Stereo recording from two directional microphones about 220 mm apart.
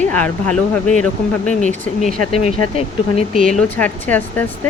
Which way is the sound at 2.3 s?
30° left (ahead or behind).